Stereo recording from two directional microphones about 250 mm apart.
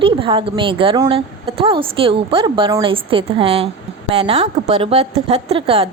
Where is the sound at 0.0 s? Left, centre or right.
Right.